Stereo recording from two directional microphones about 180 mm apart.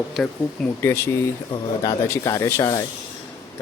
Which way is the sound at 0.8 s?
15° left (ahead or behind).